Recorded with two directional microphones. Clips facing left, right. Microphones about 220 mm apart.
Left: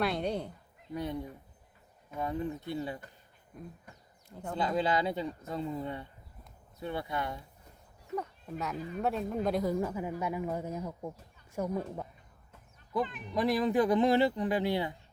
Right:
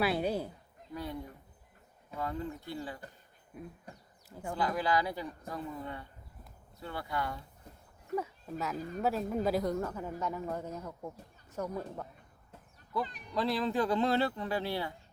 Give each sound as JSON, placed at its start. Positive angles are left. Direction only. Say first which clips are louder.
{"t": 0.0, "sound": "speech", "louder": "right 1 dB", "side_deg": -5}
{"t": 0.9, "sound": "speech", "louder": "left 4 dB", "side_deg": 20}
{"t": 3.5, "sound": "speech", "louder": "right 1 dB", "side_deg": -5}
{"t": 4.5, "sound": "speech", "louder": "left 1 dB", "side_deg": 25}
{"t": 8.1, "sound": "speech", "louder": "right 1 dB", "side_deg": -5}
{"t": 9.7, "sound": "speech", "louder": "left 3 dB", "side_deg": 10}
{"t": 13.3, "sound": "speech", "louder": "left 4 dB", "side_deg": 15}